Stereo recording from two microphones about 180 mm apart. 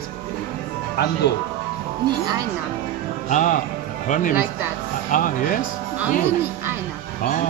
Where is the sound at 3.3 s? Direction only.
45° left (ahead or behind).